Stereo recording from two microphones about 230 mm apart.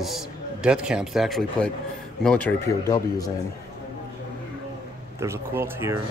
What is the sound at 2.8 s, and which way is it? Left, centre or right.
Speech, centre.